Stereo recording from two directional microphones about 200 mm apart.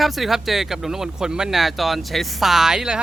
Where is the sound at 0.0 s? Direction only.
Centre (ahead or behind).